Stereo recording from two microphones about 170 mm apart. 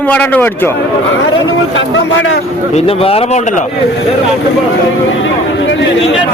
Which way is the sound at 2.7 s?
35° left (ahead or behind).